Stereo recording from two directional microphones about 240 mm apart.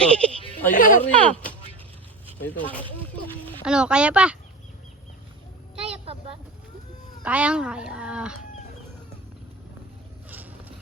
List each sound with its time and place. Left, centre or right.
0.0 s goat: centre
0.7 s a sound: left
1.0 s speech: centre
3.6 s speech: centre
5.8 s a sound: right
7.2 s speech: centre
10.2 s vehicle: centre